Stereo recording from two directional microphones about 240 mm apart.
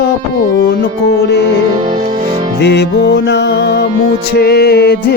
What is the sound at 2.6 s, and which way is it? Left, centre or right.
Music, left.